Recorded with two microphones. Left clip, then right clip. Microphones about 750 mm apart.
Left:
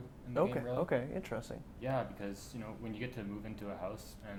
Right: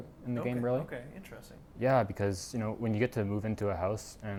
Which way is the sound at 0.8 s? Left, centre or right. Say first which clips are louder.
Left 8 dB; left.